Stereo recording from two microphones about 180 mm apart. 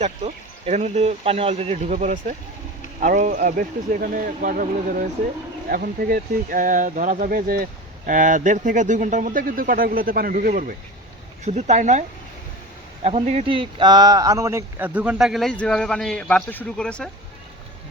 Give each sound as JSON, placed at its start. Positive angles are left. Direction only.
{"t": 0.0, "sound": "speech", "side_deg": -40}